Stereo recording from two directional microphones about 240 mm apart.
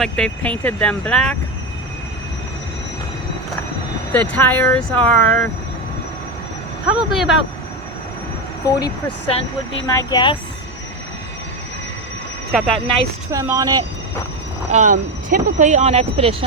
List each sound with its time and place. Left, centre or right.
0.0 s speech: centre
4.1 s speech: centre
6.8 s speech: centre
8.6 s speech: centre
12.5 s speech: centre
13.3 s speech: centre
14.7 s speech: right